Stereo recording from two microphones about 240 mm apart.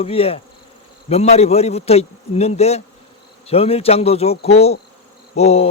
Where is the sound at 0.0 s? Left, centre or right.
Left.